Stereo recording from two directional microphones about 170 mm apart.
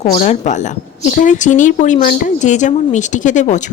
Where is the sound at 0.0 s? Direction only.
40° left (ahead or behind).